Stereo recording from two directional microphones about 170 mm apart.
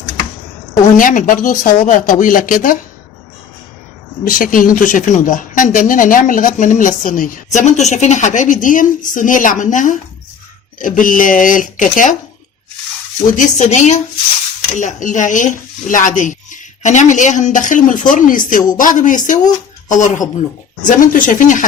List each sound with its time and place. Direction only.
0.9 s speech: 55° left (ahead or behind)
4.3 s speech: 55° left (ahead or behind)
13.3 s speech: 45° left (ahead or behind)